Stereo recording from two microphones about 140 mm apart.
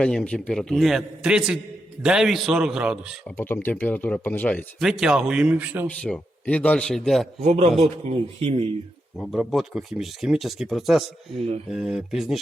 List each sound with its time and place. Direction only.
0.0 s speech: 5° left (ahead or behind)
3.2 s speech: 15° left (ahead or behind)
4.8 s speech: 5° right (ahead or behind)
5.9 s speech: 5° left (ahead or behind)
7.4 s speech: 50° right (ahead or behind)
9.1 s speech: 5° left (ahead or behind)